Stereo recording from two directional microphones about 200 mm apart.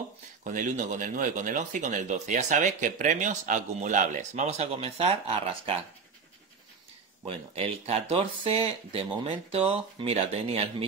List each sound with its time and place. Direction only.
0.4 s speech: 40° right (ahead or behind)
7.2 s speech: 30° right (ahead or behind)